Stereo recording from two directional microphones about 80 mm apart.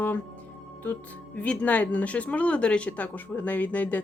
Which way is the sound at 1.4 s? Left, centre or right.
Centre.